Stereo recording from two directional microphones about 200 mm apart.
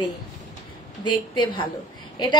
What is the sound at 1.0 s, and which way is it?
Speech, 20° left (ahead or behind).